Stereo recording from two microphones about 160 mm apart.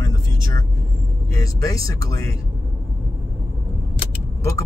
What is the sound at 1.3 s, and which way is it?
Speech, 20° left (ahead or behind).